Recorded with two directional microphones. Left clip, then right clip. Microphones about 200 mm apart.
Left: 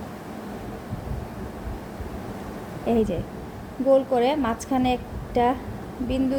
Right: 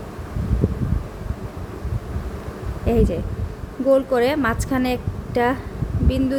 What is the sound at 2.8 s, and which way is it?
A woman's voice, 15° right (ahead or behind).